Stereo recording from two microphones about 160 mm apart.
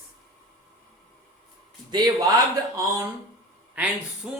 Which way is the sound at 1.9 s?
25° right (ahead or behind).